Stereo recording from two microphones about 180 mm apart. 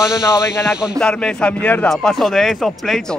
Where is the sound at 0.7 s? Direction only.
Centre (ahead or behind).